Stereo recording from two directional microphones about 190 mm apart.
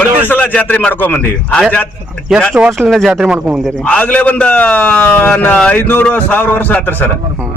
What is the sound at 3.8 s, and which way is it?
A man's voice, 5° left (ahead or behind).